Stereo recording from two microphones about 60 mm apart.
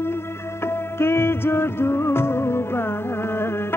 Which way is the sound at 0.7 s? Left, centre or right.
Left.